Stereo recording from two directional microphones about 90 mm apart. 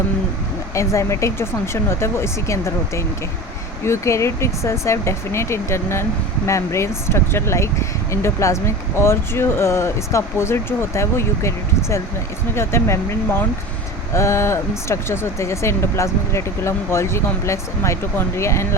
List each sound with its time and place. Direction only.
0.7 s speech: 35° left (ahead or behind)